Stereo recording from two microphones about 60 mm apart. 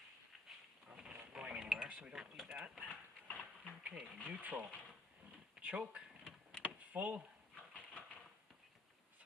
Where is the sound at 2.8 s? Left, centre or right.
Left.